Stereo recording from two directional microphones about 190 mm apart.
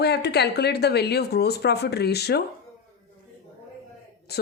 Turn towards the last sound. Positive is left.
turn(degrees=55)  # may be behind; listen again after turning